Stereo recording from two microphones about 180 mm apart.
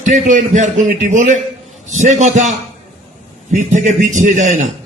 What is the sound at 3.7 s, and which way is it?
Speech, 45° right (ahead or behind).